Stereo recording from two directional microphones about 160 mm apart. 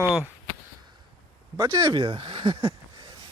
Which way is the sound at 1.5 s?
20° right (ahead or behind).